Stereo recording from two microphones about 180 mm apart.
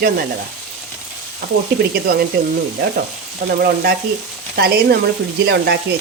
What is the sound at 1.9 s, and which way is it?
Speech, 55° right (ahead or behind).